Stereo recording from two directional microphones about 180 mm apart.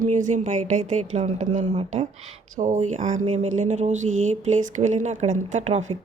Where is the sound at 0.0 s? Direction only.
45° right (ahead or behind).